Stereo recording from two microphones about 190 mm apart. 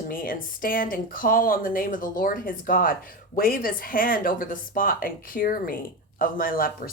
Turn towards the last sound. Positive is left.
turn(degrees=50)  # may be behind; listen again after turning